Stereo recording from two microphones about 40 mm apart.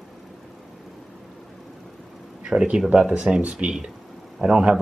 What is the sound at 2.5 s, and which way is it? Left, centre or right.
Speech, right.